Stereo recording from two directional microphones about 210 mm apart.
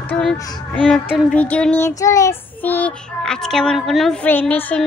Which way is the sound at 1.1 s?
Centre (ahead or behind).